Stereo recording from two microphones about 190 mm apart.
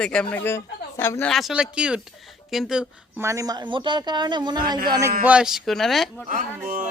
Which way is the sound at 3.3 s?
20° right (ahead or behind).